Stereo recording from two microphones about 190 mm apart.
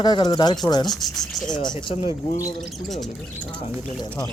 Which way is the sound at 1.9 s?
30° left (ahead or behind).